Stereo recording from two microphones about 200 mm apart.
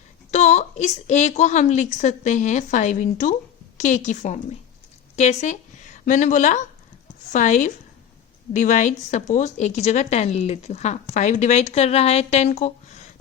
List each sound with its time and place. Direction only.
0.3 s a woman's voice: 35° left (ahead or behind)